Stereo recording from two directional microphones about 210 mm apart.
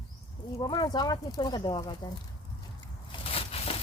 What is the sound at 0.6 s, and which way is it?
Speech, 20° left (ahead or behind).